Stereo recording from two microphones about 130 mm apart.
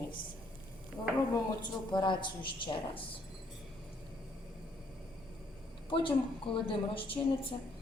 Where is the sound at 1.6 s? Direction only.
35° left (ahead or behind).